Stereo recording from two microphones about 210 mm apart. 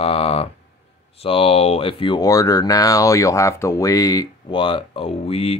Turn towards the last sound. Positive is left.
turn(degrees=30)  # may be behind; listen again after turning